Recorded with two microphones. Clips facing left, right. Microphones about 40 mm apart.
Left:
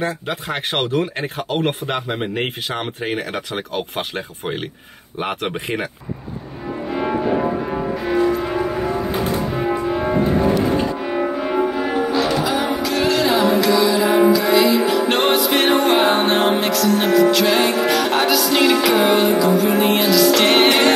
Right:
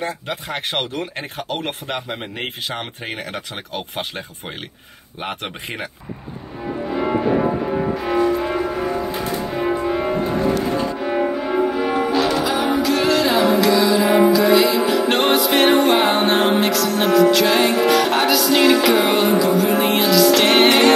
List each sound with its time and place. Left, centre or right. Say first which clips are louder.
0.0 s music: left 3 dB; centre
12.4 s music: right 2 dB; centre